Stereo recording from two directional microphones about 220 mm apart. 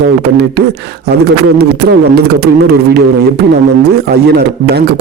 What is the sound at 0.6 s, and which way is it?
A man's voice, 45° right (ahead or behind).